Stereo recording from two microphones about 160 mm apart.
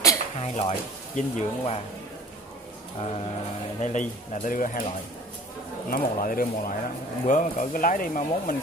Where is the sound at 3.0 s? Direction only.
40° left (ahead or behind).